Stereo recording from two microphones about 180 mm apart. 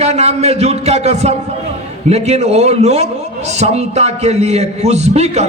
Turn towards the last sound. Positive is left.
turn(degrees=-35)  # may be behind; listen again after turning